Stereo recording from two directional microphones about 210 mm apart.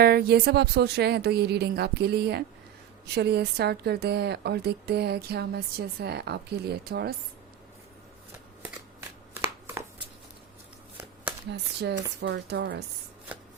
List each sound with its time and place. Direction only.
0.0 s a woman's voice: 45° right (ahead or behind)
11.5 s a woman's voice: 50° right (ahead or behind)